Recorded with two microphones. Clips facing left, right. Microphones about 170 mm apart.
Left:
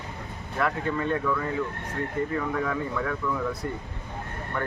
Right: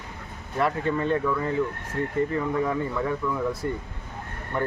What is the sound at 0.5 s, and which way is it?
Speech, 25° right (ahead or behind).